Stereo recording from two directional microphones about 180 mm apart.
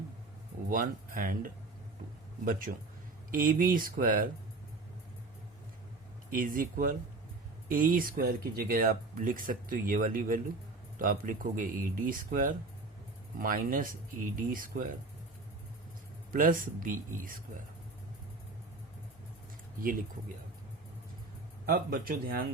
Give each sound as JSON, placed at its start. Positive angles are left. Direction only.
{"t": 0.7, "sound": "speech", "side_deg": -50}
{"t": 6.3, "sound": "speech", "side_deg": -50}
{"t": 16.3, "sound": "speech", "side_deg": -50}
{"t": 19.8, "sound": "speech", "side_deg": -50}
{"t": 21.7, "sound": "speech", "side_deg": -55}